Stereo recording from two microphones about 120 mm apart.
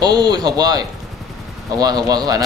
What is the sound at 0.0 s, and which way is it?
Speech, 35° right (ahead or behind).